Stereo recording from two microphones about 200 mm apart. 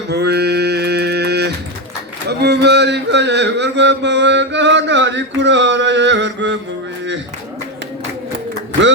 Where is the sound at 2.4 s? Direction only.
55° right (ahead or behind).